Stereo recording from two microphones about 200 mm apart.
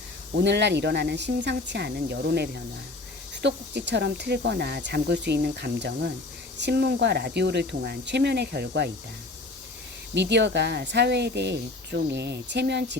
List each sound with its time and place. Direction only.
0.3 s speech: 60° right (ahead or behind)
10.2 s speech: 60° right (ahead or behind)